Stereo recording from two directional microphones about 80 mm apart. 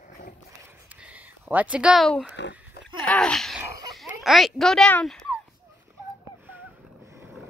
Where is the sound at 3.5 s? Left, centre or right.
Centre.